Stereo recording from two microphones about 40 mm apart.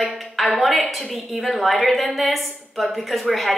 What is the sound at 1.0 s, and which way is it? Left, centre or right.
A woman's voice, centre.